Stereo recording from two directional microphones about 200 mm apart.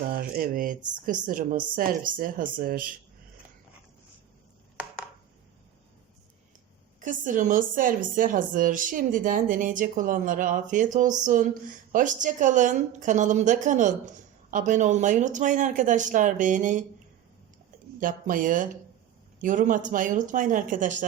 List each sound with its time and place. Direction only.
0.0 s speech: 45° right (ahead or behind)
7.0 s a woman's voice: 40° right (ahead or behind)
18.0 s a woman's voice: 40° right (ahead or behind)